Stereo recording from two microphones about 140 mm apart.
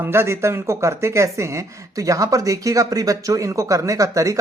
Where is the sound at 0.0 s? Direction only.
20° right (ahead or behind).